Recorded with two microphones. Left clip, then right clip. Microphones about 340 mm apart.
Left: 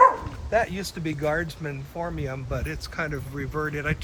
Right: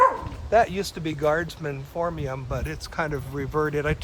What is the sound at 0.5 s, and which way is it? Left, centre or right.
Speech, centre.